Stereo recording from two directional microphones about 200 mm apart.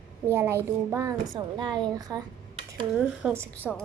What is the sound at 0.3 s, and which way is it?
A child's voice, 10° right (ahead or behind).